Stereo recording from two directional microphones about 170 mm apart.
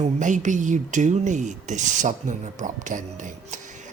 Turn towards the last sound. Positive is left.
turn(degrees=-45)  # may be behind; listen again after turning